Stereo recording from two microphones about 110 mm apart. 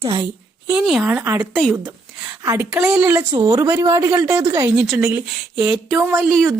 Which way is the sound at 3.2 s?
40° right (ahead or behind).